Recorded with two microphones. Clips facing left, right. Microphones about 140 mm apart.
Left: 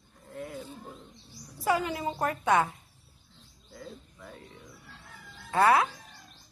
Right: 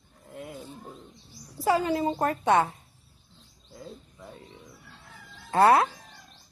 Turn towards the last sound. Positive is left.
turn(degrees=-35)  # may be behind; listen again after turning